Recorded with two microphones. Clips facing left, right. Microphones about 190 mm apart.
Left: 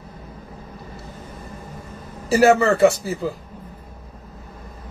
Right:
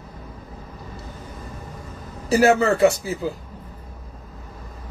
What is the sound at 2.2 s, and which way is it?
A man's voice, centre (ahead or behind).